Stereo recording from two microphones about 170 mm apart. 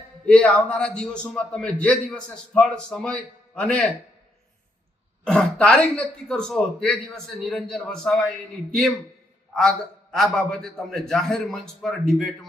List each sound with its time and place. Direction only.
0.3 s a man's voice: 5° left (ahead or behind)
5.2 s a man's voice: 5° left (ahead or behind)